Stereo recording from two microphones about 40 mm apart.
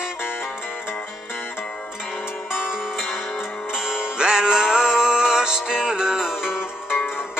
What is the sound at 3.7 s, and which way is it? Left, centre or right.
Music, centre.